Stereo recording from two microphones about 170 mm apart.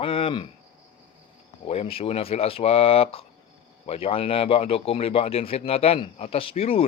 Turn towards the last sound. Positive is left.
turn(degrees=35)  # may be behind; listen again after turning